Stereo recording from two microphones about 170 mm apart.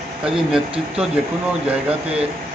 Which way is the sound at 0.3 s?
5° right (ahead or behind).